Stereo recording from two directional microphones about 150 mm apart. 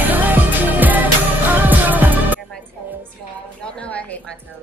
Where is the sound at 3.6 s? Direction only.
10° left (ahead or behind).